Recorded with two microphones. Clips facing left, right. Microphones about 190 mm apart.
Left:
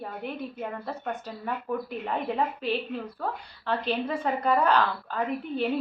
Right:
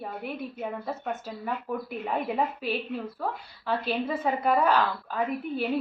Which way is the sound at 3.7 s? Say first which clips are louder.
Even; 5° right (ahead or behind).